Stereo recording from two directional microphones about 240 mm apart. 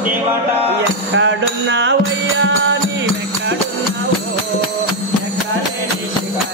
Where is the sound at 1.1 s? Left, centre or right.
Right.